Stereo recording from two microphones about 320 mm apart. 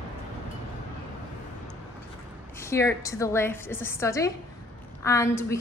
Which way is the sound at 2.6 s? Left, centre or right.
Centre.